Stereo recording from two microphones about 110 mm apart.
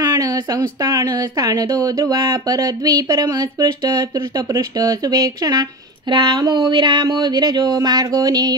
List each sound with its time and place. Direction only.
0.0 s speech: 35° right (ahead or behind)